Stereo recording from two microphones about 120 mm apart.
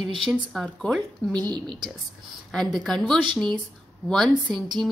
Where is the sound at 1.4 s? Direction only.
35° right (ahead or behind).